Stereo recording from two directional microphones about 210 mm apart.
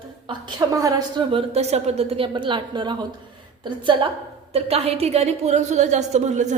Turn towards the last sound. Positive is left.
turn(degrees=-35)  # may be behind; listen again after turning